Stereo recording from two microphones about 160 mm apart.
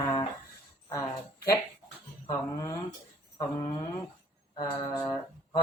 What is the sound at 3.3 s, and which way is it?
Mantra, 25° left (ahead or behind).